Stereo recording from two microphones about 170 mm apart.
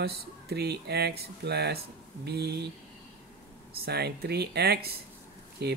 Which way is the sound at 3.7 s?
70° right (ahead or behind).